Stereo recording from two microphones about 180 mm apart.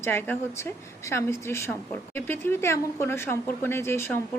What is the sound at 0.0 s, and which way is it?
A woman's voice, 10° left (ahead or behind).